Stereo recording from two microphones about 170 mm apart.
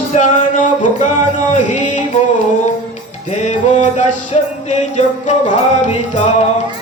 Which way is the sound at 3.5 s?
40° left (ahead or behind).